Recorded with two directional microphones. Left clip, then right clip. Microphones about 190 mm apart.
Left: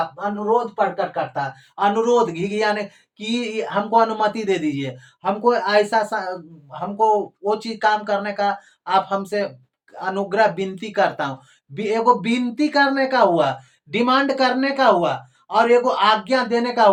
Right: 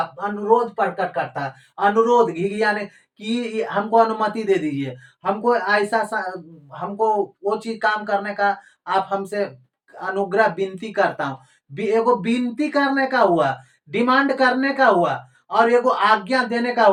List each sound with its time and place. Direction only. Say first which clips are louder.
0.9 s speech: left 1 dB; 10° left (ahead or behind)